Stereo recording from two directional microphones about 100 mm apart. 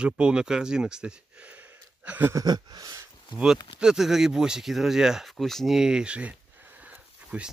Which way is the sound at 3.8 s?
5° right (ahead or behind).